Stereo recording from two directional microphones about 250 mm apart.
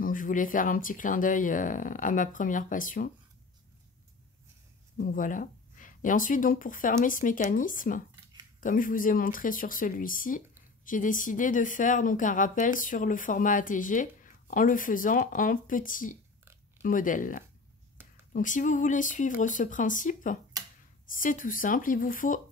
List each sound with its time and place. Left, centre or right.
0.0 s speech: left
4.9 s speech: left